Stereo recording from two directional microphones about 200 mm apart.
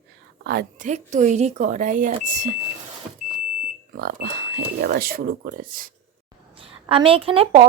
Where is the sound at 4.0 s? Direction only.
55° right (ahead or behind).